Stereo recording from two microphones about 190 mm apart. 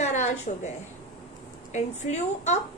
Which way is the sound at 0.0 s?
40° left (ahead or behind).